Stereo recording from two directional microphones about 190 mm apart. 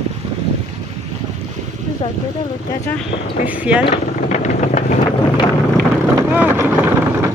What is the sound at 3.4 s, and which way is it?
Speech, 5° right (ahead or behind).